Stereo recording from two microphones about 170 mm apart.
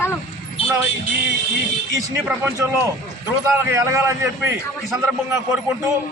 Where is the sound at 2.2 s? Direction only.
15° right (ahead or behind).